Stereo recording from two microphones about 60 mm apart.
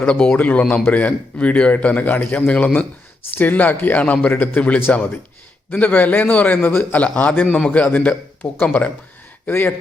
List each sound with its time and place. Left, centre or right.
0.1 s speech: centre
0.3 s a man's voice: left
7.5 s a man's voice: centre
9.5 s speech: left